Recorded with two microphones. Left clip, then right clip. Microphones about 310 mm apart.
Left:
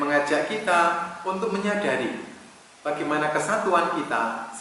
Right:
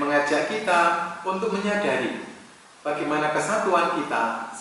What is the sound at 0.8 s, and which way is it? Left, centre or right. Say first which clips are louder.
Speech: right 1 dB; centre.